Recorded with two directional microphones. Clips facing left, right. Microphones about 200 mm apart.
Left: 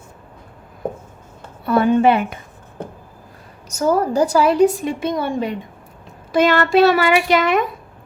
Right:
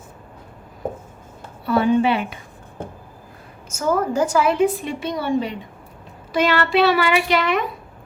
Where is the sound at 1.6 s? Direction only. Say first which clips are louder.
Left 3 dB; 50° left (ahead or behind).